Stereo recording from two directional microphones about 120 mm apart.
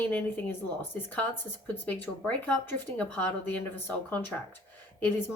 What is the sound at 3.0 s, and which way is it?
Speech, 15° left (ahead or behind).